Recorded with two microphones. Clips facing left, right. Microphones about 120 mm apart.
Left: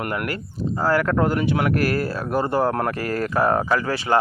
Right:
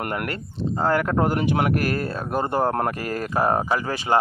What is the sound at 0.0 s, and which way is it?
Speech, 35° right (ahead or behind).